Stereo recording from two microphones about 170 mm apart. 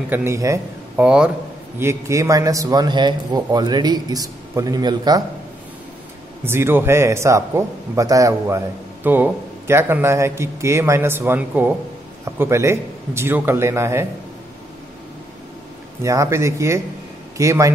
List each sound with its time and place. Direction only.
0.1 s speech: 15° right (ahead or behind)
1.0 s speech: 5° right (ahead or behind)
1.8 s a man's voice: 15° right (ahead or behind)
6.4 s a man's voice: 15° right (ahead or behind)
16.0 s a man's voice: 15° right (ahead or behind)